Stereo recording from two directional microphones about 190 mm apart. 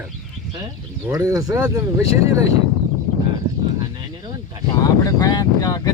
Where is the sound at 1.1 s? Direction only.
20° right (ahead or behind).